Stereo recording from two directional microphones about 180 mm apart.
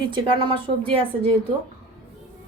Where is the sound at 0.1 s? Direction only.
25° right (ahead or behind).